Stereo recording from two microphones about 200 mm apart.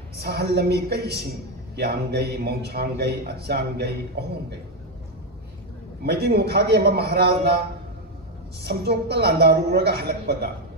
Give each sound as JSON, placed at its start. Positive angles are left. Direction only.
{"t": 0.2, "sound": "a man's voice", "side_deg": -55}
{"t": 6.0, "sound": "a man's voice", "side_deg": -55}
{"t": 8.6, "sound": "a man's voice", "side_deg": -50}